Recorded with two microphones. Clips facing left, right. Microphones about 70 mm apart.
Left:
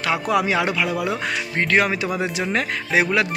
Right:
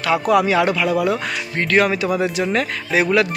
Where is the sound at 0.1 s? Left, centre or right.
Left.